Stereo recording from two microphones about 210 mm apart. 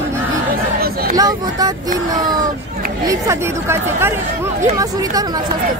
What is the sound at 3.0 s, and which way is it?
Speech, 15° right (ahead or behind).